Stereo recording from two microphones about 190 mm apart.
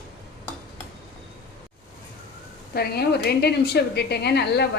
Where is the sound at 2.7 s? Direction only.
55° left (ahead or behind).